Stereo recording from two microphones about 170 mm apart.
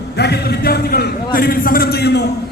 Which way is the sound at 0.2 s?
70° left (ahead or behind).